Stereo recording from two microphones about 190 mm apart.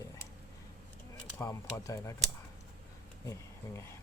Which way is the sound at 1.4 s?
15° left (ahead or behind).